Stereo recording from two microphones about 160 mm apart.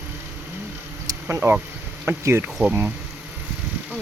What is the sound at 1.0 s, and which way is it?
Insect, 15° right (ahead or behind).